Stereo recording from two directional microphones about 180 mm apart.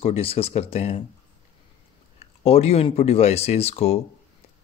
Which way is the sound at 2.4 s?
35° left (ahead or behind).